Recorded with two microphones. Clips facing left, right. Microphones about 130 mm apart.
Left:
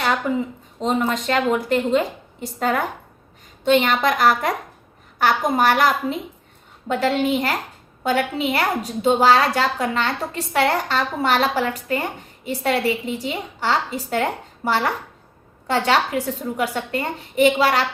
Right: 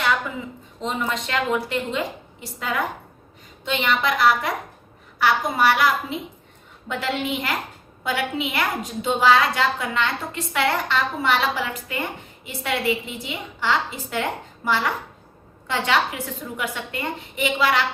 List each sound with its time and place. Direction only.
0.3 s a woman's voice: 35° left (ahead or behind)